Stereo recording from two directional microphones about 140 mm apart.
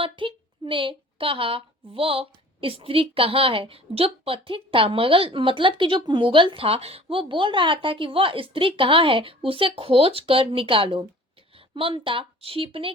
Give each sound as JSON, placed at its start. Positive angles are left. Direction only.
{"t": 0.0, "sound": "a woman's voice", "side_deg": -40}